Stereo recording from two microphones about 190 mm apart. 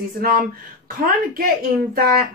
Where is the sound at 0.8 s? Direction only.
50° right (ahead or behind).